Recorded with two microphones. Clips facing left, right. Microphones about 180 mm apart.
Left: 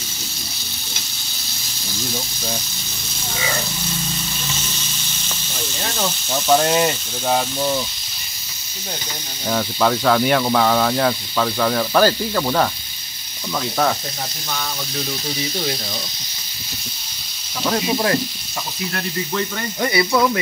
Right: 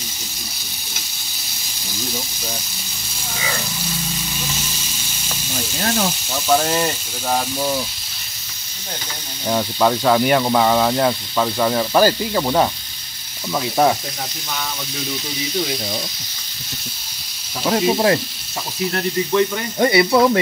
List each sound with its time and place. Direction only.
6.5 s speech: 5° left (ahead or behind)
9.5 s speech: 10° right (ahead or behind)
17.6 s speech: 25° right (ahead or behind)
19.8 s speech: 25° right (ahead or behind)